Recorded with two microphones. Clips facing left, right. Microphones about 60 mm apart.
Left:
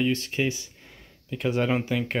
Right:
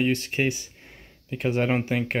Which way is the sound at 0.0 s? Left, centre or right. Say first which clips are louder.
Right 1 dB; right.